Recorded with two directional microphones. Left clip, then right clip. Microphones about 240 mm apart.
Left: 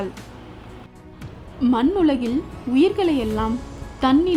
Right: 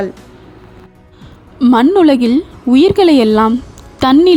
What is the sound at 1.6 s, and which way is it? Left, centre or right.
A woman's voice, right.